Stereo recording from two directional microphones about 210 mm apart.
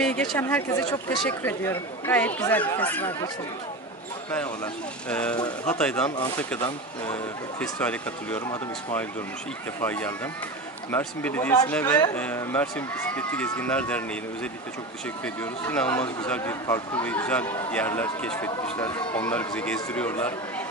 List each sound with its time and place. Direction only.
0.0 s a man's voice: 5° left (ahead or behind)
5.1 s speech: 5° left (ahead or behind)
7.6 s a man's voice: 5° left (ahead or behind)
9.8 s a man's voice: 10° left (ahead or behind)